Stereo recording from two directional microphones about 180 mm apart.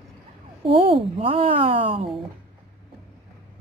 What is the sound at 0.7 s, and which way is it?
A woman's voice, 30° right (ahead or behind).